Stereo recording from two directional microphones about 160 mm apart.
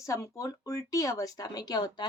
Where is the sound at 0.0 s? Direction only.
20° left (ahead or behind).